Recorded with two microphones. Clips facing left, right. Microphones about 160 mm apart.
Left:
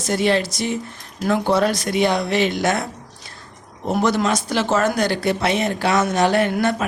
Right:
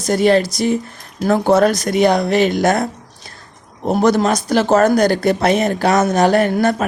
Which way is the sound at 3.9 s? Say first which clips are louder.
Right 5 dB; 40° right (ahead or behind).